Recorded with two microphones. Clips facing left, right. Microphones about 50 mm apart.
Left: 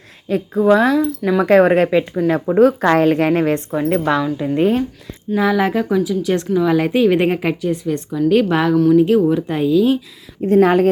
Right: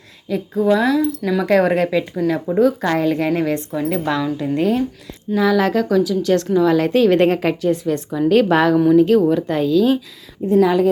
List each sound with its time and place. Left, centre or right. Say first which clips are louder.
0.3 s speech: left 3 dB; left
0.6 s speech: left 2 dB; left
1.5 s speech: left 4 dB; left
2.3 s a woman's voice: left 4 dB; left
3.8 s a woman's voice: left 3 dB; left; by 8.7 s centre
8.7 s speech: left 4 dB; centre
9.0 s a woman's voice: even; centre
10.4 s a woman's voice: left 2 dB; left